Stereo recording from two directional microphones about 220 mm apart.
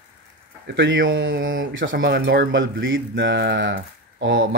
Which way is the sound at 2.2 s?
55° right (ahead or behind).